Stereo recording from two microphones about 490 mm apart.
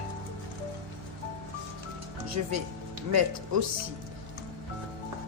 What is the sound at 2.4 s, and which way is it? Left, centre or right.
Speech, right.